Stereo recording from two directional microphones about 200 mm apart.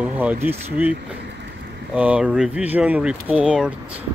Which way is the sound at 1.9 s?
5° right (ahead or behind).